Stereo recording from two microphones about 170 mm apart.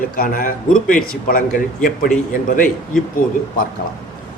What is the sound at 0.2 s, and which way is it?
Speech, 55° left (ahead or behind).